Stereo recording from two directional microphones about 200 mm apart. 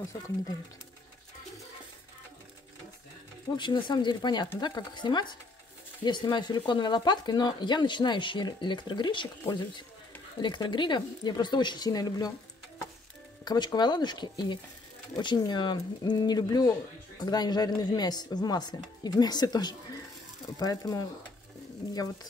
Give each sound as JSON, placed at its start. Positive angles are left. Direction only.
{"t": 3.5, "sound": "speech", "side_deg": 25}
{"t": 13.4, "sound": "speech", "side_deg": 20}